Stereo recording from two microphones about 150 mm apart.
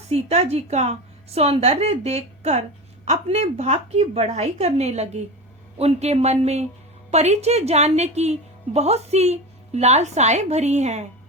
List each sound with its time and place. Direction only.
0.1 s a woman's voice: 45° right (ahead or behind)